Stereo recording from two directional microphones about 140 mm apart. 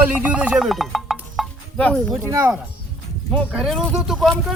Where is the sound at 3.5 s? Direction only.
5° right (ahead or behind).